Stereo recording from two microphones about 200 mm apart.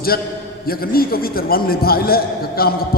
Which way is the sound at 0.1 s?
50° left (ahead or behind).